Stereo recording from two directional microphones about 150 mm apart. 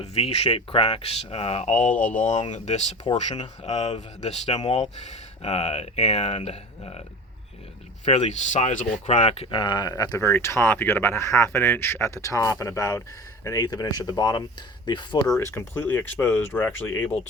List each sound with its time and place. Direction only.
0.0 s speech: 40° left (ahead or behind)
8.0 s speech: 50° left (ahead or behind); by 15.2 s 30° left (ahead or behind)
15.4 s speech: 15° left (ahead or behind)